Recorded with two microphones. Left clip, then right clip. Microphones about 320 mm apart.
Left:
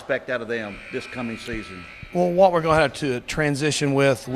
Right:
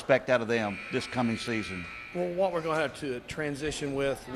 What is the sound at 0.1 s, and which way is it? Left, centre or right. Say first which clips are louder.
Speech: even; centre.